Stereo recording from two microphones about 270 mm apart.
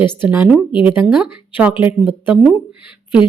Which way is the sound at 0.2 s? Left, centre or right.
Centre.